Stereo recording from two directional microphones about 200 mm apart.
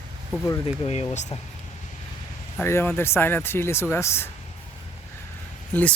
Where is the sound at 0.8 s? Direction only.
30° left (ahead or behind).